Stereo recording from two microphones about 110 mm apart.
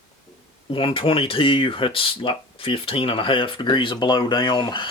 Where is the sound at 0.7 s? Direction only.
50° left (ahead or behind).